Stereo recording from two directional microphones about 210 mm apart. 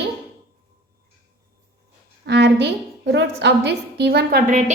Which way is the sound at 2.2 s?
55° right (ahead or behind).